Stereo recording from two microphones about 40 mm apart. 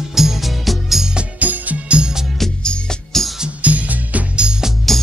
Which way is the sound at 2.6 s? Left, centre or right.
Left.